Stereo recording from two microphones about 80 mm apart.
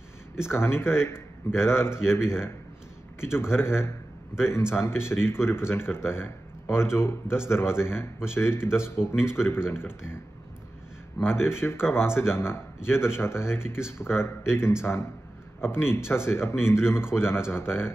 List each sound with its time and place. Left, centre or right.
0.4 s speech: left